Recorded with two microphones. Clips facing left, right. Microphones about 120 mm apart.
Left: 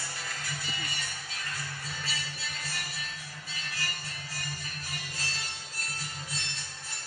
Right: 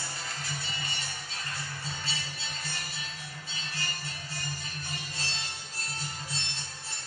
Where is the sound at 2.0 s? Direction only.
25° right (ahead or behind).